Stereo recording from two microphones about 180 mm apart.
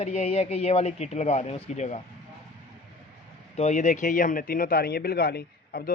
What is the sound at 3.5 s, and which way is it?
Speech, 40° left (ahead or behind).